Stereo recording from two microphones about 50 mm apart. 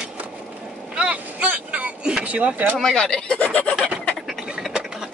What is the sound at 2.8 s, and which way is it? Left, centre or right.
Speech, centre.